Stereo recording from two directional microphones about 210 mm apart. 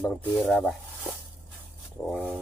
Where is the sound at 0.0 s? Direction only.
5° left (ahead or behind).